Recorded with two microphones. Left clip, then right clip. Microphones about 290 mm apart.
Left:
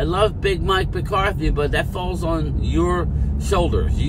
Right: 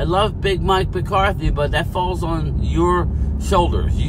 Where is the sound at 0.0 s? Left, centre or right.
Centre.